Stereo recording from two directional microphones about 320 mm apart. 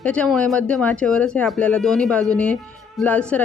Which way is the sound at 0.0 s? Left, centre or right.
Centre.